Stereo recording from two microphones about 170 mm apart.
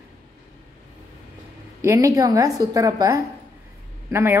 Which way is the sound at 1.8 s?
20° right (ahead or behind).